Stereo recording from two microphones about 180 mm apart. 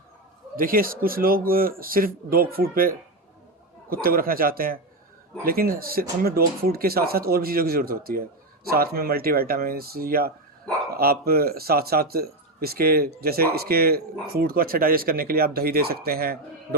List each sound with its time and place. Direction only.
0.5 s a man's voice: 50° right (ahead or behind)